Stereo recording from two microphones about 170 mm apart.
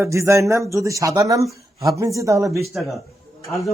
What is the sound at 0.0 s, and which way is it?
Speech, 15° right (ahead or behind).